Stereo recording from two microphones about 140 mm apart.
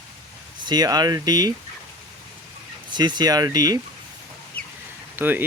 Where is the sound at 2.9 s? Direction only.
30° right (ahead or behind).